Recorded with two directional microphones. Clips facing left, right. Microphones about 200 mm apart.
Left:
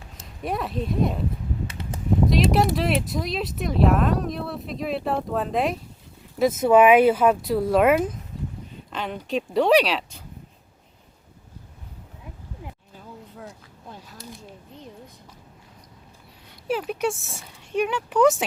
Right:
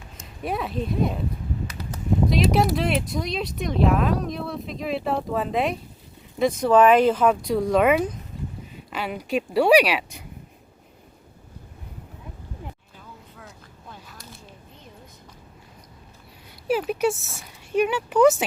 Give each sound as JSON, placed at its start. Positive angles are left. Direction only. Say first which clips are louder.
{"t": 0.4, "sound": "speech", "louder": "even", "side_deg": 0}
{"t": 1.6, "sound": "a sound", "louder": "left 1 dB", "side_deg": 25}
{"t": 2.3, "sound": "speech", "louder": "even", "side_deg": 0}
{"t": 8.9, "sound": "speech", "louder": "right 1 dB", "side_deg": -10}
{"t": 16.6, "sound": "speech", "louder": "right 3 dB", "side_deg": -5}